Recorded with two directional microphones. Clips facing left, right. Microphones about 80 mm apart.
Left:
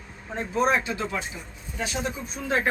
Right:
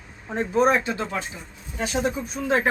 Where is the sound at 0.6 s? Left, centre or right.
Right.